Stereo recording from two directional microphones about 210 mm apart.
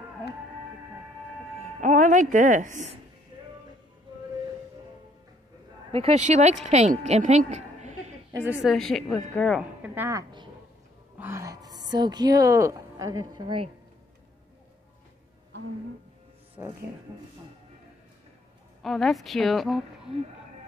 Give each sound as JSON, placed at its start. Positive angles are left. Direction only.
{"t": 1.8, "sound": "music", "side_deg": -35}
{"t": 2.3, "sound": "a woman's voice", "side_deg": -40}
{"t": 5.9, "sound": "a woman's voice", "side_deg": -30}
{"t": 8.3, "sound": "a woman's voice", "side_deg": -10}
{"t": 8.6, "sound": "a woman's voice", "side_deg": 0}
{"t": 16.6, "sound": "speech", "side_deg": -15}
{"t": 18.8, "sound": "a woman's voice", "side_deg": 0}